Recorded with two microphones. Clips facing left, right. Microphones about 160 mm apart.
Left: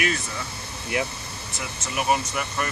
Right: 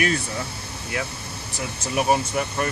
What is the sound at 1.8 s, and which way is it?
Speech, 35° right (ahead or behind).